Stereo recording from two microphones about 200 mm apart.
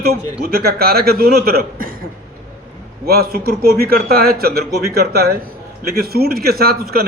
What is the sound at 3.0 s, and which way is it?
A man's voice, 50° right (ahead or behind).